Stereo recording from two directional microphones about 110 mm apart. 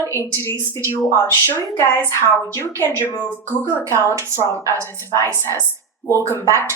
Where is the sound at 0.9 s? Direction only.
25° left (ahead or behind).